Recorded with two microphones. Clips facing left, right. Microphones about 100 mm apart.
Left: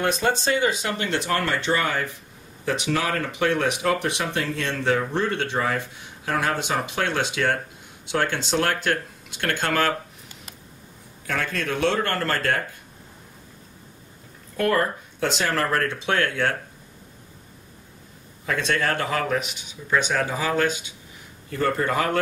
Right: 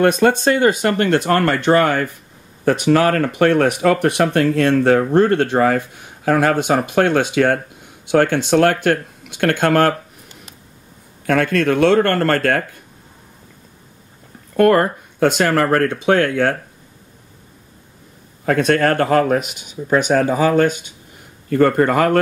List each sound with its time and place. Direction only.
0.0 s speech: 55° right (ahead or behind)
11.2 s speech: 60° right (ahead or behind)
14.6 s speech: 60° right (ahead or behind)
18.4 s speech: 60° right (ahead or behind)